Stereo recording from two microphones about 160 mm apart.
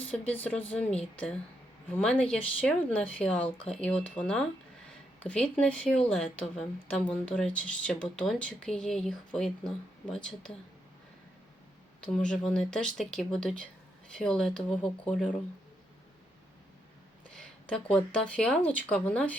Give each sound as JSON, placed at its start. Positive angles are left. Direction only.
{"t": 0.0, "sound": "speech", "side_deg": 10}
{"t": 1.9, "sound": "speech", "side_deg": 5}
{"t": 11.9, "sound": "speech", "side_deg": 5}
{"t": 17.3, "sound": "speech", "side_deg": 5}